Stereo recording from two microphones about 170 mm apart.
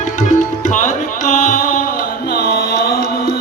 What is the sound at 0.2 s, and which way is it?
Tabla, 50° left (ahead or behind).